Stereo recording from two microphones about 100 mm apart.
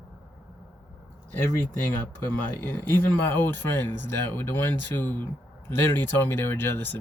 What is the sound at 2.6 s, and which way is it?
Speech, 20° left (ahead or behind).